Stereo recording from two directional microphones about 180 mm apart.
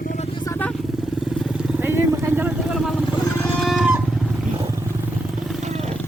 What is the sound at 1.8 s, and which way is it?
Vehicle, 10° right (ahead or behind).